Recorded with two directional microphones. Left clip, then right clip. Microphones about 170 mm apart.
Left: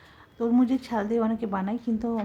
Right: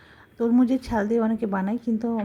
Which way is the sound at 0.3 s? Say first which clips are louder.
Right 2 dB; 15° right (ahead or behind).